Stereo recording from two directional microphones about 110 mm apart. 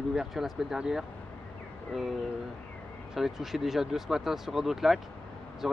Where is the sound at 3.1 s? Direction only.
5° right (ahead or behind).